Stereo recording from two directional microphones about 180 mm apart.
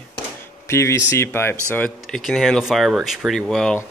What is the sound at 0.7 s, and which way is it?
Speech, 15° left (ahead or behind).